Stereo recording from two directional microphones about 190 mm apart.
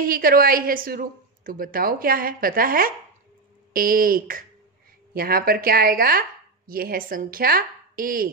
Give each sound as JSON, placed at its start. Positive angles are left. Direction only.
{"t": 0.1, "sound": "speech", "side_deg": -50}